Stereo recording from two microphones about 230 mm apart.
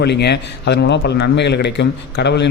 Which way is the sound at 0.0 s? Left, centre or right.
Left.